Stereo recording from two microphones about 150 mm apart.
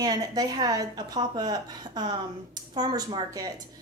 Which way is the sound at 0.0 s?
25° right (ahead or behind).